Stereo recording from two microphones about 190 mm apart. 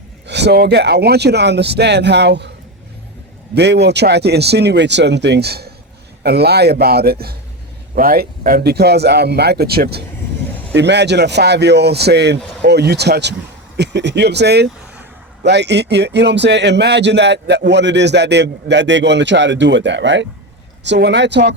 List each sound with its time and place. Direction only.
0.3 s speech: 65° right (ahead or behind)
3.5 s speech: 60° right (ahead or behind)
10.7 s a man's voice: 65° right (ahead or behind)